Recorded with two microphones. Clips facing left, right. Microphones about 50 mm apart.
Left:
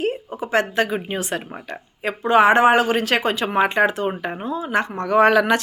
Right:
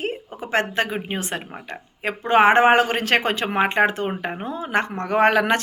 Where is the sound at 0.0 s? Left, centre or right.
Right.